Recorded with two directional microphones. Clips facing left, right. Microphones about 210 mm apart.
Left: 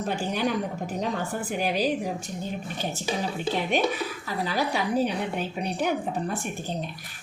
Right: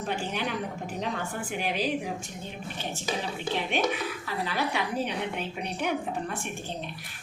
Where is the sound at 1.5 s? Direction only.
40° left (ahead or behind).